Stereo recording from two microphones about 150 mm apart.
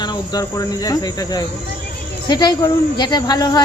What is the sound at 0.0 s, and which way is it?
Speech, 25° left (ahead or behind).